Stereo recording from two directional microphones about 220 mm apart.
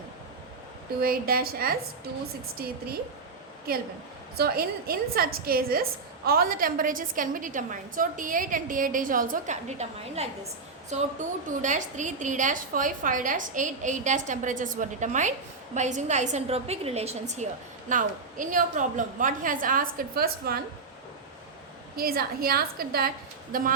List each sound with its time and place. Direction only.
1.0 s a woman's voice: 40° right (ahead or behind)
4.4 s a woman's voice: 45° right (ahead or behind)
21.9 s a woman's voice: 45° right (ahead or behind)